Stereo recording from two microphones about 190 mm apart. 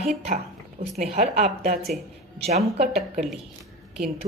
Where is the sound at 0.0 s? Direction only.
35° right (ahead or behind).